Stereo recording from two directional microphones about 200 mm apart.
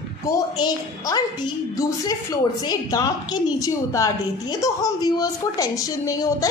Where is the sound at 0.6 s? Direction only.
20° left (ahead or behind).